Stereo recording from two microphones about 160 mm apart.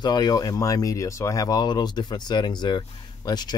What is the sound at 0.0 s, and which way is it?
Speech, 25° left (ahead or behind).